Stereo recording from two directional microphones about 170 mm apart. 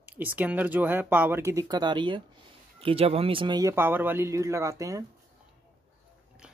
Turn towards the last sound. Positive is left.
turn(degrees=-20)  # may be behind; listen again after turning